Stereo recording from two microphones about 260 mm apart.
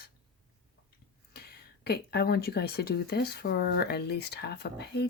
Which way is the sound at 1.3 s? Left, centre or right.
Left.